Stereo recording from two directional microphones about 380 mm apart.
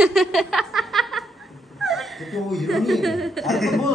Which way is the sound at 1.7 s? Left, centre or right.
Centre.